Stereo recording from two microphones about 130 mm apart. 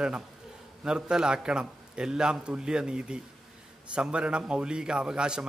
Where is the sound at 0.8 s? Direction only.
5° right (ahead or behind).